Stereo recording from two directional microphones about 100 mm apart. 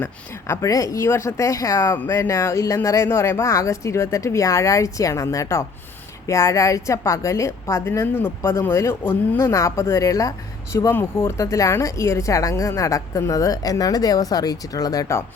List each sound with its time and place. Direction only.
0.0 s speech: 25° left (ahead or behind)
8.4 s speech: 35° left (ahead or behind)